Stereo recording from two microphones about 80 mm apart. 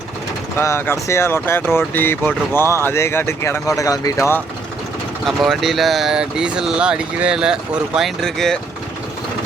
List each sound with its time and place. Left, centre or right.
0.6 s speech: left
5.2 s speech: centre
7.9 s speech: centre